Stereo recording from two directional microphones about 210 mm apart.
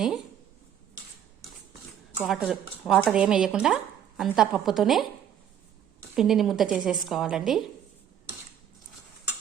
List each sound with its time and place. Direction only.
2.2 s speech: centre (ahead or behind)
6.1 s speech: centre (ahead or behind)